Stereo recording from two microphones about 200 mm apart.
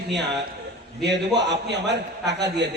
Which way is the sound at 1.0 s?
60° right (ahead or behind).